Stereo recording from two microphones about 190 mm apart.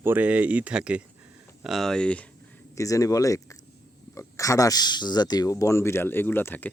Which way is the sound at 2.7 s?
15° left (ahead or behind).